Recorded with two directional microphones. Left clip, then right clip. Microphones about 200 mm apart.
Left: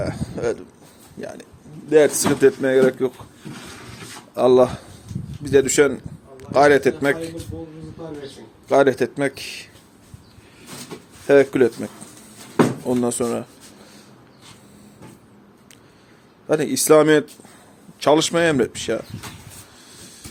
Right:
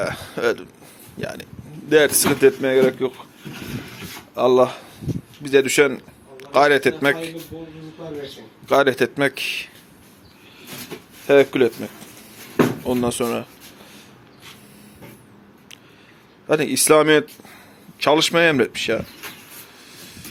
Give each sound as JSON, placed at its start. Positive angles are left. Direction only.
{"t": 0.0, "sound": "a sound", "side_deg": 10}
{"t": 1.2, "sound": "speech", "side_deg": 5}
{"t": 4.4, "sound": "a man's voice", "side_deg": 30}
{"t": 8.6, "sound": "speech", "side_deg": 10}
{"t": 11.3, "sound": "speech", "side_deg": 25}
{"t": 13.0, "sound": "speech", "side_deg": 20}
{"t": 16.5, "sound": "speech", "side_deg": 15}